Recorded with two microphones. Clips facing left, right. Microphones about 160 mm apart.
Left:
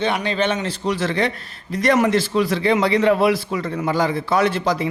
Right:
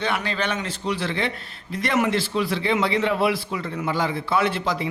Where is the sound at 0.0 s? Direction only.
20° left (ahead or behind).